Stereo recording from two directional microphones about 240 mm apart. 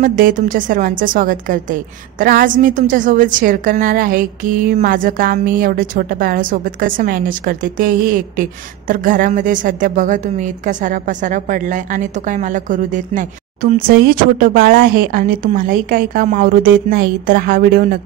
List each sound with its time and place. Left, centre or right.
0.0 s a woman's voice: right